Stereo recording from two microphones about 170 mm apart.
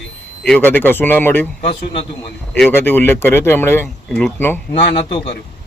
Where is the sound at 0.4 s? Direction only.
5° left (ahead or behind).